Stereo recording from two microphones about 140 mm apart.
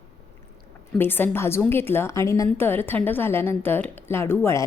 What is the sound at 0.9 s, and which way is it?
A woman's voice, 15° left (ahead or behind).